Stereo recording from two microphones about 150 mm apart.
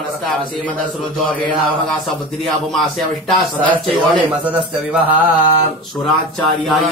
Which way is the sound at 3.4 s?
5° left (ahead or behind).